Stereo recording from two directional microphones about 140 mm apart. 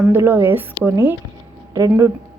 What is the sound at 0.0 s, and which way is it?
A woman's voice, 15° right (ahead or behind).